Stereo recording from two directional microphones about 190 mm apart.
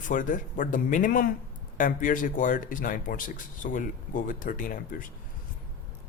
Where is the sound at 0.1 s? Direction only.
45° left (ahead or behind).